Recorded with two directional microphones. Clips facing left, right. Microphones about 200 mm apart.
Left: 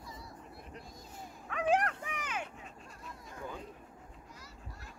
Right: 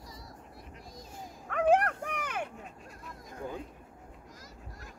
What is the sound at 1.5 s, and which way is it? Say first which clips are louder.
Dog: right 5 dB; 55° right (ahead or behind).